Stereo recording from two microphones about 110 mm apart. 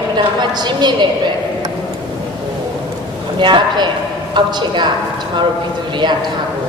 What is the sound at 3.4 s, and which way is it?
A woman's voice, 45° right (ahead or behind).